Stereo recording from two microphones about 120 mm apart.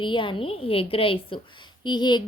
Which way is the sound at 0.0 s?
45° left (ahead or behind).